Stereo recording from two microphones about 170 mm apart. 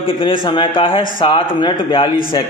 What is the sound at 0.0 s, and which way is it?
A man's voice, 30° left (ahead or behind).